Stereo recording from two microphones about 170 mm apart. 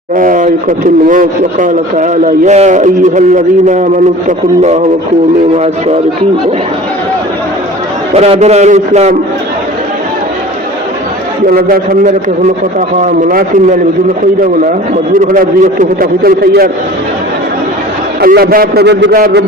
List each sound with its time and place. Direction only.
0.2 s a sound: 50° right (ahead or behind)
1.0 s a man's voice: 50° right (ahead or behind)
8.1 s a man's voice: 40° right (ahead or behind)
11.4 s a man's voice: 60° right (ahead or behind)
15.1 s a man's voice: 55° right (ahead or behind)
18.2 s a man's voice: 65° right (ahead or behind)